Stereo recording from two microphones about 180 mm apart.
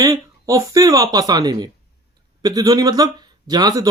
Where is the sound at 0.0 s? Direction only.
20° right (ahead or behind).